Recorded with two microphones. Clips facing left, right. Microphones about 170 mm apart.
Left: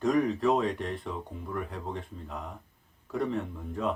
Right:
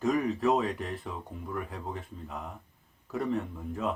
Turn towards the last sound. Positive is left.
turn(degrees=0)  # may be behind; listen again after turning